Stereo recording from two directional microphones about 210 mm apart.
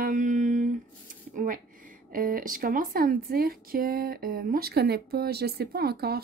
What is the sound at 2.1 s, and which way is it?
Speech, 40° right (ahead or behind).